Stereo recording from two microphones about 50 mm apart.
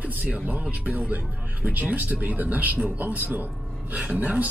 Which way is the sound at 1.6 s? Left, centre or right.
Right.